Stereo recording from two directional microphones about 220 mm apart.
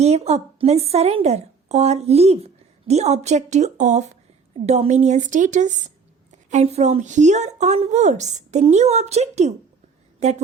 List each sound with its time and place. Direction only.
0.0 s a woman's voice: 30° right (ahead or behind)